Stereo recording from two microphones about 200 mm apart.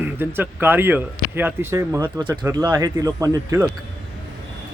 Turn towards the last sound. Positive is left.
turn(degrees=-15)  # may be behind; listen again after turning